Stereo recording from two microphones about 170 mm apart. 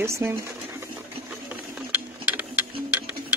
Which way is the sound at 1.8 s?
10° right (ahead or behind).